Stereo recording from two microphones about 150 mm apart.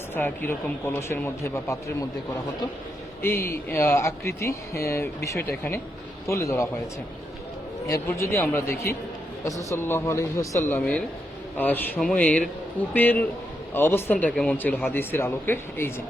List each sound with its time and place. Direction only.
0.1 s speech: 15° left (ahead or behind)
3.4 s speech: 15° left (ahead or behind)
7.9 s speech: 20° left (ahead or behind)